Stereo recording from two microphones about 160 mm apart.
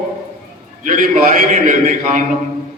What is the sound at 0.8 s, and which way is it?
A man's voice, 55° right (ahead or behind).